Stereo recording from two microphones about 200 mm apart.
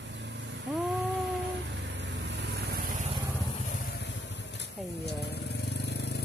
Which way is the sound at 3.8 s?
60° left (ahead or behind).